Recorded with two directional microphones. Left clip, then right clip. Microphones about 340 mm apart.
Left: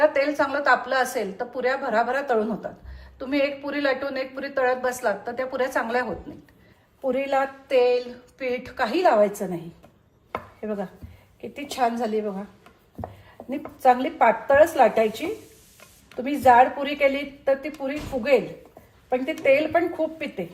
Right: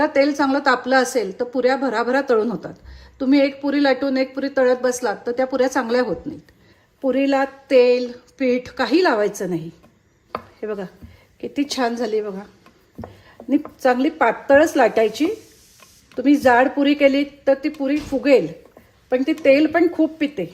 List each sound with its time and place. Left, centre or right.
0.0 s a woman's voice: centre
7.1 s a woman's voice: right
10.6 s chopping: right
11.3 s a woman's voice: right
13.4 s a sound: centre
13.7 s a woman's voice: right